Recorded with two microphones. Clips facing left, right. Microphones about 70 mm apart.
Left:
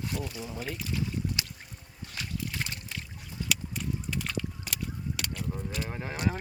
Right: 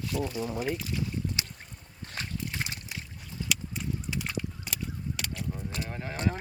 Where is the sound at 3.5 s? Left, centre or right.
Centre.